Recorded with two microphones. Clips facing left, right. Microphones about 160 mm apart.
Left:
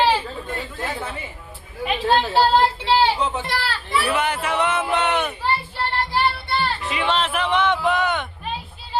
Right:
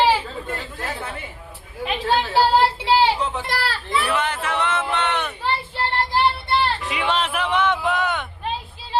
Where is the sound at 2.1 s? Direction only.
10° right (ahead or behind).